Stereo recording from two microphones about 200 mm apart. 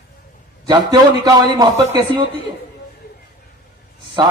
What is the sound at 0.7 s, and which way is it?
A man's voice, 20° right (ahead or behind).